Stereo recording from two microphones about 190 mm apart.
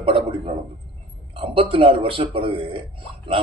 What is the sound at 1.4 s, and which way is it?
A man's voice, 25° right (ahead or behind).